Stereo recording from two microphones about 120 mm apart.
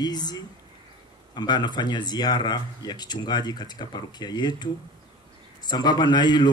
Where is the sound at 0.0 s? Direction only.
35° left (ahead or behind).